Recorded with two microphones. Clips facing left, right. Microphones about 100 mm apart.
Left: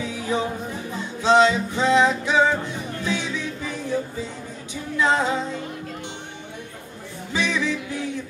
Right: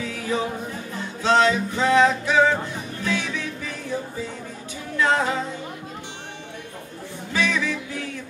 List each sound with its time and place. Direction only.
0.0 s singing: 15° left (ahead or behind)
0.9 s music: 20° left (ahead or behind)
4.9 s music: 15° left (ahead or behind)
7.3 s music: 20° left (ahead or behind)